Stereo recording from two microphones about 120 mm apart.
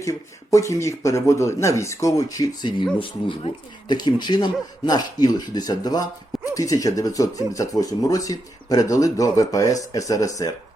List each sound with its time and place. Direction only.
0.0 s speech: 25° left (ahead or behind)